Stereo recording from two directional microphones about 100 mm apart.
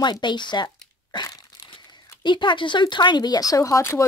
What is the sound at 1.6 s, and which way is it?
Crumpling, 50° left (ahead or behind).